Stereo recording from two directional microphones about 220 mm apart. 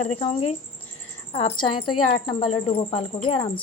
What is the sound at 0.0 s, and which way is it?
A woman's voice, 30° left (ahead or behind).